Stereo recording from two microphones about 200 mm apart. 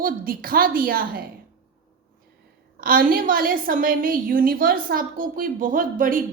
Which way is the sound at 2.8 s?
45° right (ahead or behind).